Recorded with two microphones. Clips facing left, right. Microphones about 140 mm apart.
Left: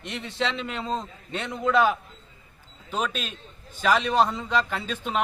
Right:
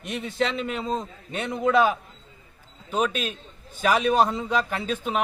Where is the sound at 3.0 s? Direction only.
10° right (ahead or behind).